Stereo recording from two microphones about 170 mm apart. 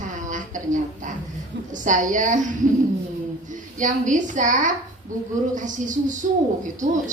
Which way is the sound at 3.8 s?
50° right (ahead or behind).